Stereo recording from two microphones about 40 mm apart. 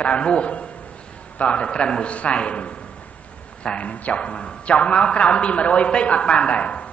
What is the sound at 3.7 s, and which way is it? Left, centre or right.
A man's voice, left.